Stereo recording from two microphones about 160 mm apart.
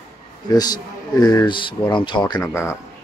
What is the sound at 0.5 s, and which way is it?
Speech, 25° left (ahead or behind).